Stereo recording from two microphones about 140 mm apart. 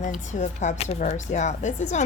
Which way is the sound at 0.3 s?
60° left (ahead or behind).